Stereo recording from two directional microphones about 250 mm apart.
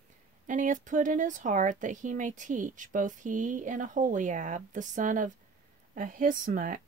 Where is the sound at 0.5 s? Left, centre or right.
Right.